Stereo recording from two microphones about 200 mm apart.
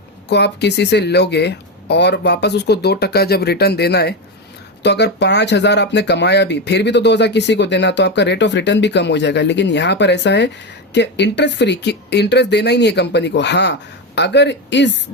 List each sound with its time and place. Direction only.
0.3 s speech: 55° left (ahead or behind)